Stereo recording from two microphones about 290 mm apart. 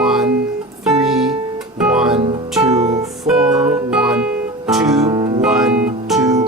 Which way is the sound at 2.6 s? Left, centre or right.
Right.